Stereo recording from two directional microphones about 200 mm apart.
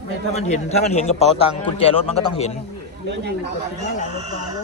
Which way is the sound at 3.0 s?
55° right (ahead or behind).